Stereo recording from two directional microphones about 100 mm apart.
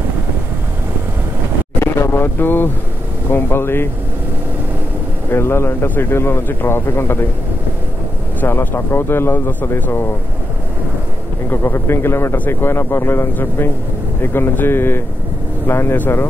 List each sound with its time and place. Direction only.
1.8 s vehicle: 25° left (ahead or behind)
3.3 s a man's voice: 20° left (ahead or behind)
5.3 s a man's voice: 25° left (ahead or behind)
8.4 s a man's voice: 25° left (ahead or behind)
11.5 s a man's voice: 25° left (ahead or behind)